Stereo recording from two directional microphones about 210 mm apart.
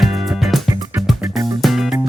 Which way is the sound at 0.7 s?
15° right (ahead or behind).